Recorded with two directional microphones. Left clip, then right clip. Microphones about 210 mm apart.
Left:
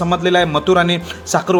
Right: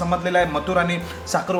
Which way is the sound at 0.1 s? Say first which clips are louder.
Left 5 dB; 45° left (ahead or behind).